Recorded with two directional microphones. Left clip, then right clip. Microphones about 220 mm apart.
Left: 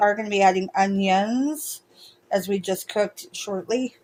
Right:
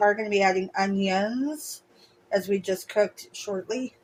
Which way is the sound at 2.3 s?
40° left (ahead or behind).